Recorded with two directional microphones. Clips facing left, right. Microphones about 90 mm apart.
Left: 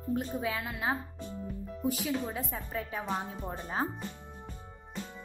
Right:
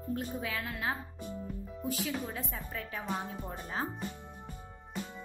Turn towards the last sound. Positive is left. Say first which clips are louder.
# left 3 dB
turn(degrees=20)  # may be behind; listen again after turning